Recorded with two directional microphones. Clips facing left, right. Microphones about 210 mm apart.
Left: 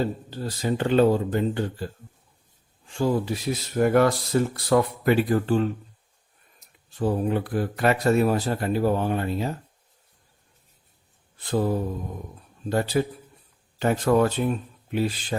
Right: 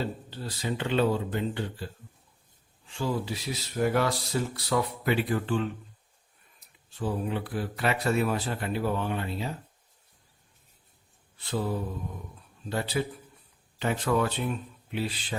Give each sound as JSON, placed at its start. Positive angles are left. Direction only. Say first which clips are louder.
{"t": 0.0, "sound": "speech", "louder": "left 6 dB", "side_deg": 45}
{"t": 2.9, "sound": "speech", "louder": "left 7 dB", "side_deg": 50}
{"t": 7.0, "sound": "speech", "louder": "left 6 dB", "side_deg": 45}
{"t": 11.3, "sound": "mantra", "louder": "left 6 dB", "side_deg": 45}
{"t": 12.6, "sound": "speech", "louder": "left 6 dB", "side_deg": 45}